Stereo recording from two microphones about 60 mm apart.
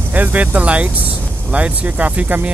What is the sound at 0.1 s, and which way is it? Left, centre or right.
Speech, right.